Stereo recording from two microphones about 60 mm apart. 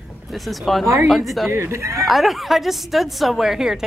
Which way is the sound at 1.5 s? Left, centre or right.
Right.